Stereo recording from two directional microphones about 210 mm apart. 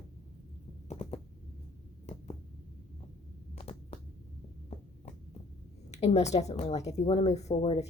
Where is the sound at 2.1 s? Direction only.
35° left (ahead or behind).